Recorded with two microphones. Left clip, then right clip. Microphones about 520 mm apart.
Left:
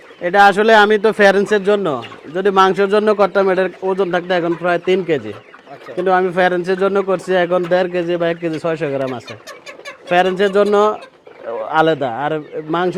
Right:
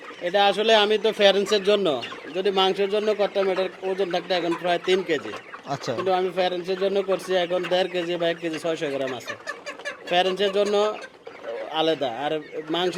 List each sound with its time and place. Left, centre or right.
0.3 s speech: left
2.3 s a man's voice: left